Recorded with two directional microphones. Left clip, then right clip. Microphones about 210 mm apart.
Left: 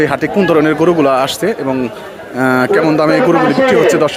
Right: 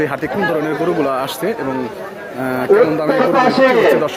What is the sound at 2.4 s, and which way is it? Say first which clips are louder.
Speech: left 1 dB; 30° left (ahead or behind).